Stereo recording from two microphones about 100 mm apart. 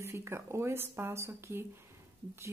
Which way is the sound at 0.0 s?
25° right (ahead or behind).